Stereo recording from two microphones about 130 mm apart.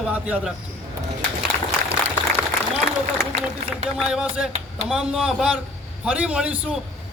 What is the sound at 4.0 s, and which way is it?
A man's voice, 5° right (ahead or behind).